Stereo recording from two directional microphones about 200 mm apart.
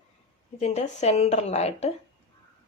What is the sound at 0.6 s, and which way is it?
A woman's voice, 35° left (ahead or behind).